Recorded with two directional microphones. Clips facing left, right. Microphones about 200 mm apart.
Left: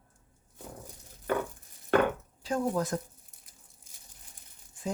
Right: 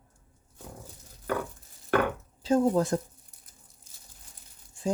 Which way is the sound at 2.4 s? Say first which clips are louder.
Right 6 dB; 25° right (ahead or behind).